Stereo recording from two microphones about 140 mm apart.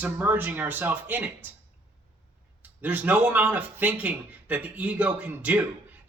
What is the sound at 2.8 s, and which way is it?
A man's voice, 10° right (ahead or behind).